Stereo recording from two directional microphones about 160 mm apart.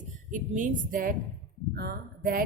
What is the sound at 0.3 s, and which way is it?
Speech, 50° right (ahead or behind).